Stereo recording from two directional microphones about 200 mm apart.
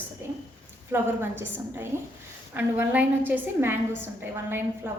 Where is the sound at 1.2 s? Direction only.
10° right (ahead or behind).